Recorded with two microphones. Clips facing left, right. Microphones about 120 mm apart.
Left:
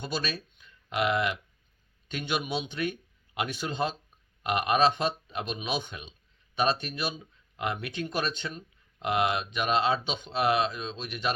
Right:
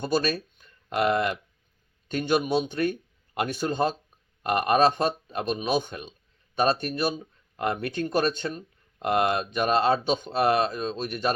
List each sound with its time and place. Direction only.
0.0 s a man's voice: 45° right (ahead or behind)